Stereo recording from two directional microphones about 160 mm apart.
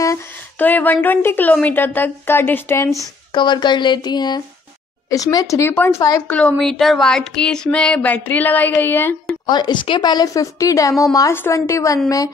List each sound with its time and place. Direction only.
0.0 s a woman's voice: 15° left (ahead or behind)
3.3 s a woman's voice: 30° left (ahead or behind)
6.2 s a woman's voice: 10° left (ahead or behind)
9.5 s a woman's voice: 30° left (ahead or behind)